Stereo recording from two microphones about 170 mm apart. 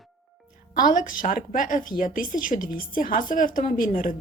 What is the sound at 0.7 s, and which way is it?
A woman's voice, 50° left (ahead or behind).